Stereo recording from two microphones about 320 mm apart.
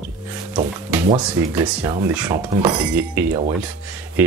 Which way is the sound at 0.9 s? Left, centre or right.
Centre.